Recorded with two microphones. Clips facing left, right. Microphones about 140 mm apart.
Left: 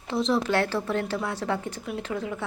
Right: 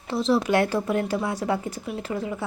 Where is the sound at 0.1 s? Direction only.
5° right (ahead or behind).